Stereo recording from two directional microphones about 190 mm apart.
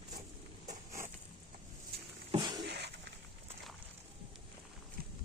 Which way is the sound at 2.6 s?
60° right (ahead or behind).